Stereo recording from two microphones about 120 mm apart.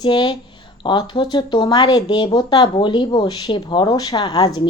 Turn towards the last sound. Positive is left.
turn(degrees=35)  # may be behind; listen again after turning